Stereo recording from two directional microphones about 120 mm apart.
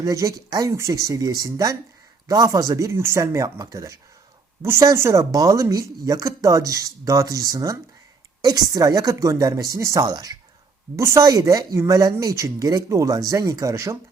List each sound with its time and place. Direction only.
0.0 s speech: 30° right (ahead or behind)